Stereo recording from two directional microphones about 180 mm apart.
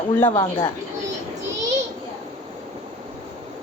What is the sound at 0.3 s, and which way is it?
Speech, 30° left (ahead or behind).